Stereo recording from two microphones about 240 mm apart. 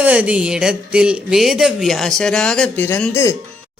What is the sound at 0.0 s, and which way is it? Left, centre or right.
Speech, centre.